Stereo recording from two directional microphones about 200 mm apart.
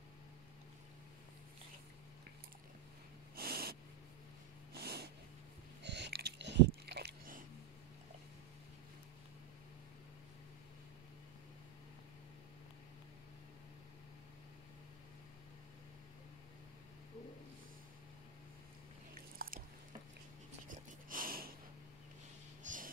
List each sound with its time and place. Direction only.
3.3 s snort: 50° right (ahead or behind)
4.8 s snort: 50° right (ahead or behind)
5.8 s a sound: 60° right (ahead or behind)
19.3 s biting: 45° right (ahead or behind)
20.6 s wheeze: 45° right (ahead or behind)
22.6 s snort: 40° right (ahead or behind)